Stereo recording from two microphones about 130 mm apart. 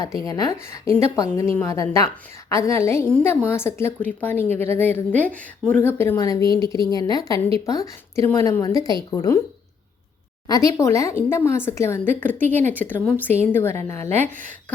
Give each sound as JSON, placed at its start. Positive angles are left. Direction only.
{"t": 0.3, "sound": "speech", "side_deg": 30}
{"t": 6.4, "sound": "a woman's voice", "side_deg": -40}
{"t": 6.8, "sound": "speech", "side_deg": 30}
{"t": 10.4, "sound": "speech", "side_deg": 30}